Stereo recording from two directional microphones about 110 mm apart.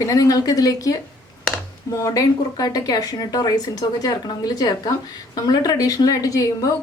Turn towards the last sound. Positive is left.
turn(degrees=30)  # may be behind; listen again after turning